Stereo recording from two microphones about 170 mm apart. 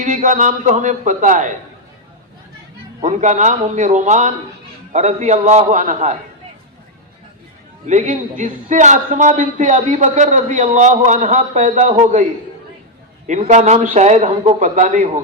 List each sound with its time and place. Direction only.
0.0 s a man's voice: 45° right (ahead or behind)
3.0 s a man's voice: 45° right (ahead or behind)
7.9 s a man's voice: 45° right (ahead or behind)
13.2 s a man's voice: 45° right (ahead or behind)